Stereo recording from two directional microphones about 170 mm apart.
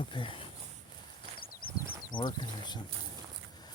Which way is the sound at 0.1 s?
30° left (ahead or behind).